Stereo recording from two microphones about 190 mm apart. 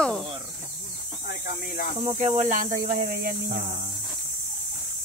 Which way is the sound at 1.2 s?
50° left (ahead or behind).